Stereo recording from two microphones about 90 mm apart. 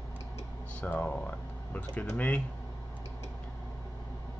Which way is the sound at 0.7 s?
15° left (ahead or behind).